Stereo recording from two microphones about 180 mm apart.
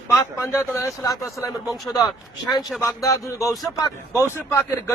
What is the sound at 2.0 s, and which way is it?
Speech, 20° left (ahead or behind).